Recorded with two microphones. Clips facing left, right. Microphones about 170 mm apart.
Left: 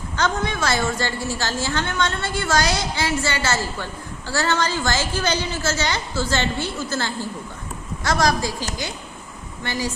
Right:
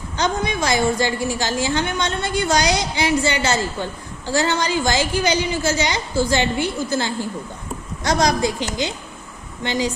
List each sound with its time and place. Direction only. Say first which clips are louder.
0.2 s a woman's voice: right 2 dB; 15° right (ahead or behind)